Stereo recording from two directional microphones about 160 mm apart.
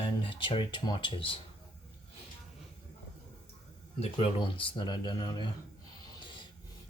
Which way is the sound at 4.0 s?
35° left (ahead or behind).